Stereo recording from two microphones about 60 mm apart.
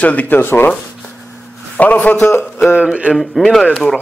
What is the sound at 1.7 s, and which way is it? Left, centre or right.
Speech, left.